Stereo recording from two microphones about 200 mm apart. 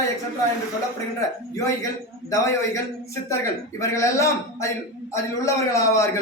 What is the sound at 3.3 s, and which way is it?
A man's voice, 15° left (ahead or behind).